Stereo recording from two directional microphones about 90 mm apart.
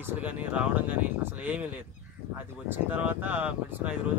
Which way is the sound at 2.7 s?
20° right (ahead or behind).